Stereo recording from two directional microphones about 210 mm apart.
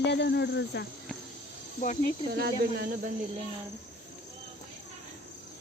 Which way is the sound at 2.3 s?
50° right (ahead or behind).